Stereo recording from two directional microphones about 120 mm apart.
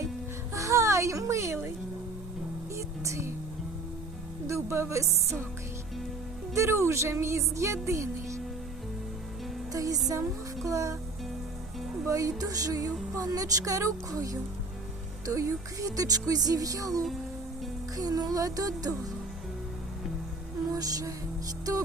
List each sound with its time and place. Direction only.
0.5 s music: 25° right (ahead or behind)
2.7 s music: 25° right (ahead or behind)
4.4 s speech: 25° right (ahead or behind)
6.5 s music: 25° right (ahead or behind)
9.7 s music: 30° right (ahead or behind)
12.0 s music: 30° right (ahead or behind)
17.9 s speech: 30° right (ahead or behind)
20.7 s music: 30° right (ahead or behind)